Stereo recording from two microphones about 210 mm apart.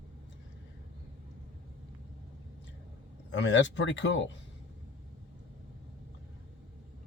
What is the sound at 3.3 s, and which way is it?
Speech, 60° left (ahead or behind).